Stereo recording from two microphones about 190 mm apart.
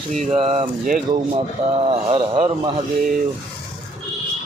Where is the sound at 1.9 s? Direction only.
30° right (ahead or behind).